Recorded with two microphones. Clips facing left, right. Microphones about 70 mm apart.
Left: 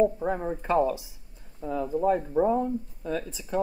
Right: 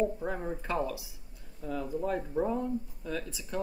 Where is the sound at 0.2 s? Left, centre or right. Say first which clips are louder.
Left 6 dB; centre.